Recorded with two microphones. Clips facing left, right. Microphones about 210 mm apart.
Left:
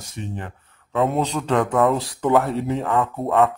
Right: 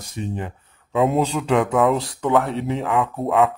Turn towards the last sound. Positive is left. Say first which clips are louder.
# even
turn(degrees=0)  # may be behind; listen again after turning